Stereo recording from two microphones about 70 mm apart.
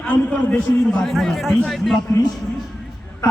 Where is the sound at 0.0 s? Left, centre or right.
Left.